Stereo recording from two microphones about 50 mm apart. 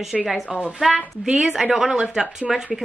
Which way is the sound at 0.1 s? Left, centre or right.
Centre.